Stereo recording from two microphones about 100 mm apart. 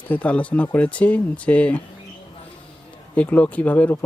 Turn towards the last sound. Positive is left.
turn(degrees=15)  # may be behind; listen again after turning